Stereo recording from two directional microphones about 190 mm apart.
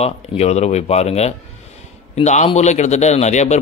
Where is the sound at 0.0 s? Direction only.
35° left (ahead or behind).